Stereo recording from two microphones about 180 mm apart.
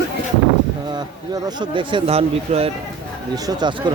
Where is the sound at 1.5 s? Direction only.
25° right (ahead or behind).